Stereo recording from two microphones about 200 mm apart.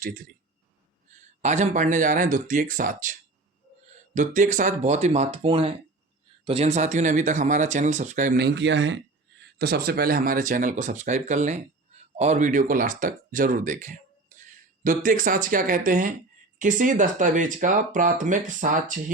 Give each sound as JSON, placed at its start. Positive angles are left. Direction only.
{"t": 1.4, "sound": "speech", "side_deg": -35}
{"t": 8.4, "sound": "speech", "side_deg": -60}
{"t": 9.6, "sound": "speech", "side_deg": -50}